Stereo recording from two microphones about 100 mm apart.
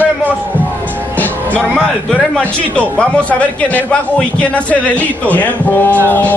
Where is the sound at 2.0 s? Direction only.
10° left (ahead or behind).